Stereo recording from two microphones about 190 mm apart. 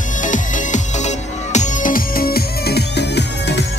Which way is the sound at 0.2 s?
40° left (ahead or behind).